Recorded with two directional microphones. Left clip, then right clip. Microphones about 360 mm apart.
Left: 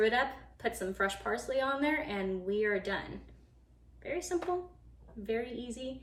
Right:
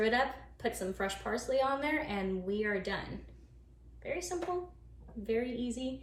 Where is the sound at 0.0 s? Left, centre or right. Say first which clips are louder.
Left 1 dB; centre.